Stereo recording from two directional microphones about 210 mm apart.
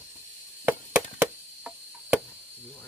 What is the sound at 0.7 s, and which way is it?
Chop, 10° right (ahead or behind).